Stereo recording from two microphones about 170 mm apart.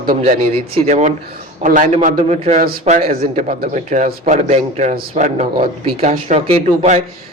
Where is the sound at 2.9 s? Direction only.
55° right (ahead or behind).